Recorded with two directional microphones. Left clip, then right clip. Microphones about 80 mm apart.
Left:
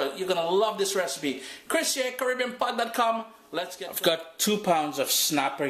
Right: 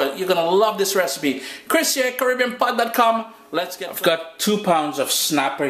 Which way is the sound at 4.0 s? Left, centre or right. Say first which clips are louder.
Right 6 dB; left.